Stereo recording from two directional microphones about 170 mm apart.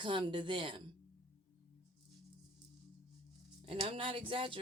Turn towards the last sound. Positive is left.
turn(degrees=-30)  # may be behind; listen again after turning